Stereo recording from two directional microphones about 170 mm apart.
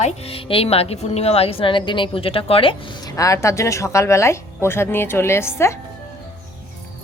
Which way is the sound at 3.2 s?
20° left (ahead or behind).